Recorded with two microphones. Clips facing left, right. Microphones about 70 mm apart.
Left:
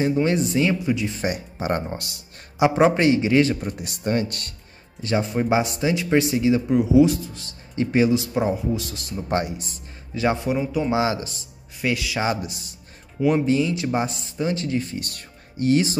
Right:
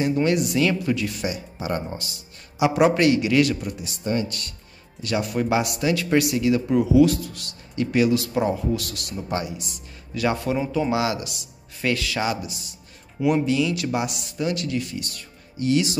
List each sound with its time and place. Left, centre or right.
0.2 s speech: left
1.2 s speech: left
2.6 s speech: left
3.7 s speech: left
5.0 s speech: left
9.3 s speech: left
10.1 s speech: left
11.8 s speech: centre
12.4 s speech: left
15.0 s speech: left